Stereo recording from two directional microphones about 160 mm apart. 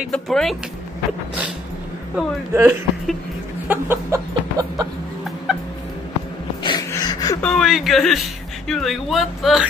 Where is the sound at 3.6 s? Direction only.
15° right (ahead or behind).